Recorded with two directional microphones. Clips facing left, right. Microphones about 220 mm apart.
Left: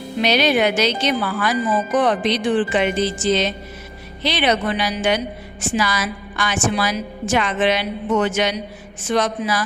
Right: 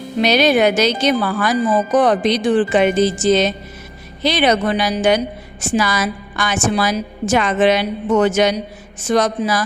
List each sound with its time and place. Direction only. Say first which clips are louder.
0.2 s a woman's voice: right 4 dB; 45° right (ahead or behind)